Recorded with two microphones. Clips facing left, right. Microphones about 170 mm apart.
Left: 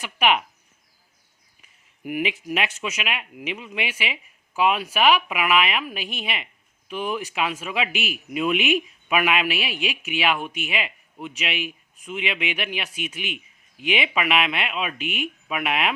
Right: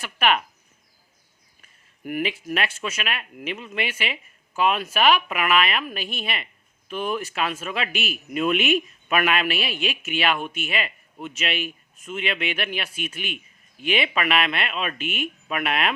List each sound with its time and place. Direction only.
0.0 s speech: 15° left (ahead or behind)
1.6 s speech: 15° left (ahead or behind)